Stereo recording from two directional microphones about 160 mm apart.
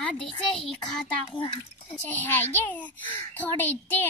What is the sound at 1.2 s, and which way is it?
Speech, 35° left (ahead or behind).